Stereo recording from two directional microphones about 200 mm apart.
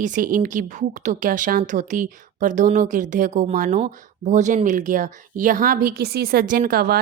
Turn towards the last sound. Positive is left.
turn(degrees=-50)  # may be behind; listen again after turning